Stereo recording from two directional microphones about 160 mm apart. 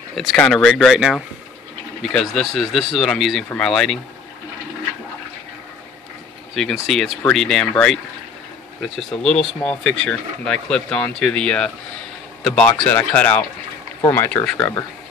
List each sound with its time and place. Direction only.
0.1 s speech: centre (ahead or behind)
6.5 s speech: centre (ahead or behind)
8.9 s speech: 5° left (ahead or behind)